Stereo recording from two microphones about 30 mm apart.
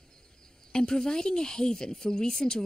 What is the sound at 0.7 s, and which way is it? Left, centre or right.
Speech, left.